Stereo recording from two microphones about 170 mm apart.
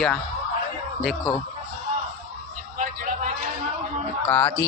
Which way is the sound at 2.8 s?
50° right (ahead or behind).